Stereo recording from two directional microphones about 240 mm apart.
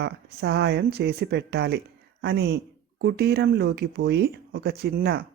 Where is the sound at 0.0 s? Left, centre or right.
Right.